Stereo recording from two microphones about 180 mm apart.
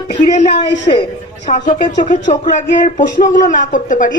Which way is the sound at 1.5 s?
45° left (ahead or behind).